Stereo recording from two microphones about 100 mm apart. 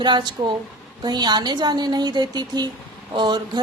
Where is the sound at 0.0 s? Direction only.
50° right (ahead or behind).